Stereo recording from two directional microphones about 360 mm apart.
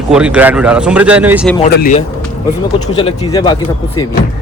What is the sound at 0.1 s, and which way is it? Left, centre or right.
Speech, centre.